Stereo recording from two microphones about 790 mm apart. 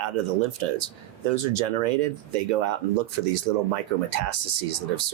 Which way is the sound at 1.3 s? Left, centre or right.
Right.